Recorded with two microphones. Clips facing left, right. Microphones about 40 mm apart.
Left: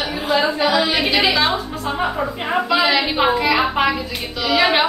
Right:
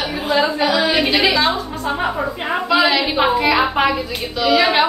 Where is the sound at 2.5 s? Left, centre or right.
Centre.